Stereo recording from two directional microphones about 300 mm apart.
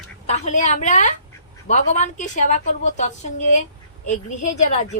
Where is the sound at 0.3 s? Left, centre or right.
Left.